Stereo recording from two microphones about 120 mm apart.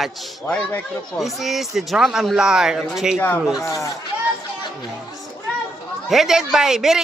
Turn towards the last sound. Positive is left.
turn(degrees=-5)  # may be behind; listen again after turning